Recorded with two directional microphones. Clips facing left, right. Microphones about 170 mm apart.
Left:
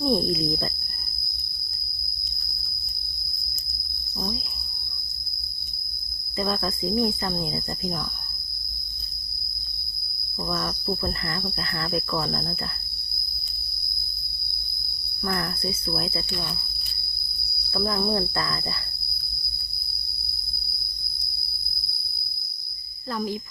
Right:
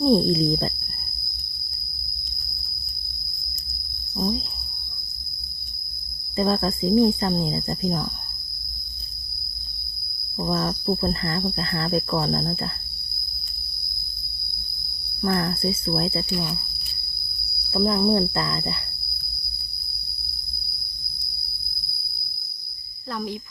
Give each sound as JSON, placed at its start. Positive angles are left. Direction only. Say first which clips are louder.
{"t": 0.0, "sound": "speech", "louder": "right 5 dB", "side_deg": -30}
{"t": 6.3, "sound": "speech", "louder": "right 5 dB", "side_deg": -30}
{"t": 10.4, "sound": "speech", "louder": "right 5 dB", "side_deg": -30}
{"t": 15.2, "sound": "speech", "louder": "right 5 dB", "side_deg": -30}
{"t": 16.3, "sound": "speech", "louder": "right 6 dB", "side_deg": -10}
{"t": 17.7, "sound": "speech", "louder": "right 5 dB", "side_deg": -25}
{"t": 23.1, "sound": "speech", "louder": "left 1 dB", "side_deg": 0}